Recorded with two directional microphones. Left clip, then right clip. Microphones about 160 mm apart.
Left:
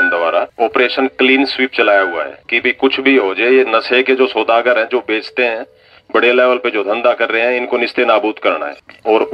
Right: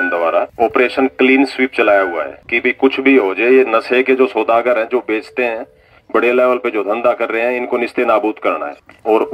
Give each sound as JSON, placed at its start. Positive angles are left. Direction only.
{"t": 0.0, "sound": "a man's voice", "side_deg": -30}